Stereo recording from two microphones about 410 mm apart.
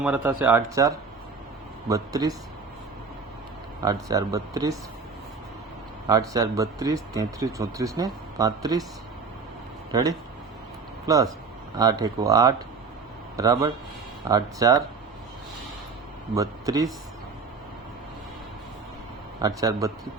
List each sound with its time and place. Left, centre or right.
0.4 s speech: centre
3.8 s speech: centre
6.1 s speech: centre
9.9 s speech: centre
16.3 s speech: centre
19.4 s speech: centre